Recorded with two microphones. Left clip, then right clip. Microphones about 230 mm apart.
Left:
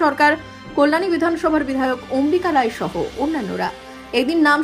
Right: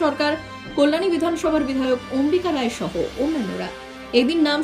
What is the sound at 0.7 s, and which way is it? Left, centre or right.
Speech, left.